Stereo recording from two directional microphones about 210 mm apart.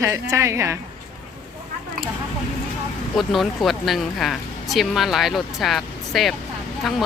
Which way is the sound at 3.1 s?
Centre (ahead or behind).